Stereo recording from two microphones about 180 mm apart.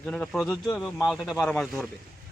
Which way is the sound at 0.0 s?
5° left (ahead or behind).